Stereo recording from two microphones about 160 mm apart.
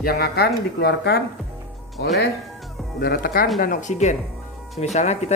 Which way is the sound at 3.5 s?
55° left (ahead or behind).